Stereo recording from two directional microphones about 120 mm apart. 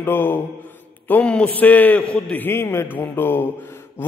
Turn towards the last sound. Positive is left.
turn(degrees=20)  # may be behind; listen again after turning